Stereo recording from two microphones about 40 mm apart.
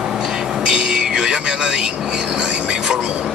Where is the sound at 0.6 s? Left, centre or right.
Right.